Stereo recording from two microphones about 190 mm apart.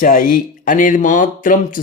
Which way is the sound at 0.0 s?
50° left (ahead or behind).